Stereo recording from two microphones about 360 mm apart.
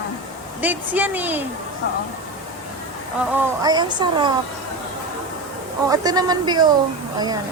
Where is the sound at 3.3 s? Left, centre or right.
Centre.